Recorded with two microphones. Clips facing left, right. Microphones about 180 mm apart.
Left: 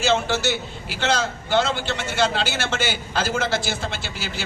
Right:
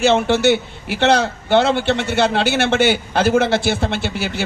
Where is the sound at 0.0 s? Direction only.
60° right (ahead or behind).